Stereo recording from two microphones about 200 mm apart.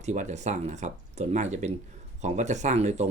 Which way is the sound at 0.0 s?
35° right (ahead or behind).